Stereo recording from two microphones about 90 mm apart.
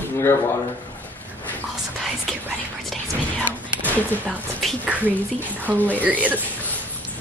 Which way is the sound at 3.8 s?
15° left (ahead or behind).